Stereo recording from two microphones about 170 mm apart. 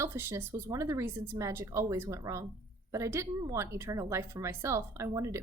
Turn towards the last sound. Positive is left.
turn(degrees=-15)  # may be behind; listen again after turning